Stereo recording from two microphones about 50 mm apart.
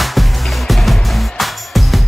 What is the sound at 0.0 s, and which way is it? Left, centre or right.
Music, centre.